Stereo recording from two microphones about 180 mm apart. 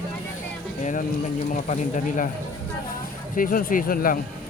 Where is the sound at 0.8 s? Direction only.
40° left (ahead or behind).